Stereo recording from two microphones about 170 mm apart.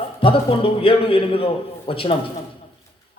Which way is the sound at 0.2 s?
30° left (ahead or behind).